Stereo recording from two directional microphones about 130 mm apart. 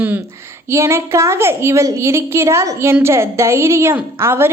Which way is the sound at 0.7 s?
20° right (ahead or behind).